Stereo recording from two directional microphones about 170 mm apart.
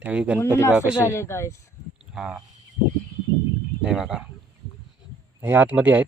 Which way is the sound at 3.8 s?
5° right (ahead or behind).